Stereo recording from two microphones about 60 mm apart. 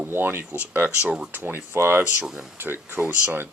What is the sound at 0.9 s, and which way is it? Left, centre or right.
Speech, centre.